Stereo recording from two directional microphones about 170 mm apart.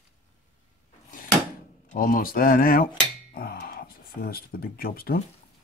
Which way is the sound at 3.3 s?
65° left (ahead or behind).